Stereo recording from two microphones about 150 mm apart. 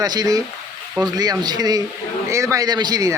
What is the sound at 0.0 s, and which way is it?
A man's voice, 25° right (ahead or behind).